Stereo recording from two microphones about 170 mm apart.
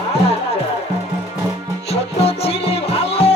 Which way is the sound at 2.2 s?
35° left (ahead or behind).